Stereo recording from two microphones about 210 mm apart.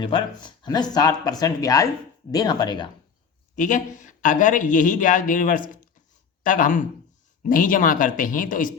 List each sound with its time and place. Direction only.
0.0 s speech: 25° left (ahead or behind)
3.5 s speech: 40° left (ahead or behind)